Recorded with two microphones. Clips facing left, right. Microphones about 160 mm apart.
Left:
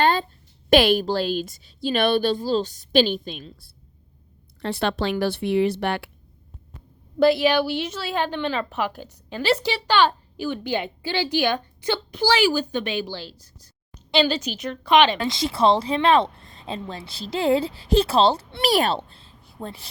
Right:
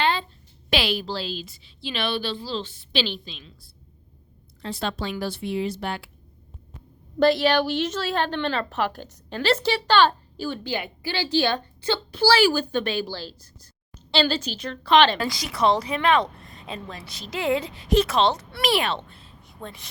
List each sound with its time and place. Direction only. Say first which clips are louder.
0.0 s a sound: left 4 dB; 45° left (ahead or behind)
0.7 s a woman's voice: left 8 dB; 50° left (ahead or behind)
4.6 s speech: left 5 dB; 65° left (ahead or behind)
7.2 s a woman's voice: left 1 dB; 10° left (ahead or behind); by 19.9 s 30° left (ahead or behind)